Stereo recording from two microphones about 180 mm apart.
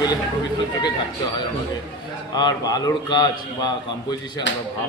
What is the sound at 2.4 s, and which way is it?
Speech, 20° left (ahead or behind).